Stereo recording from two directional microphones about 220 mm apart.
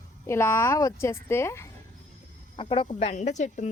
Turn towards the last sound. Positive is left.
turn(degrees=30)  # may be behind; listen again after turning